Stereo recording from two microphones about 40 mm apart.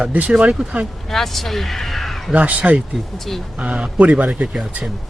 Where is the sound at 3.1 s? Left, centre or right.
Centre.